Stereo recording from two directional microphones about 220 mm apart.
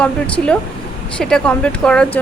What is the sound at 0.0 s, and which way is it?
Speech, 5° left (ahead or behind).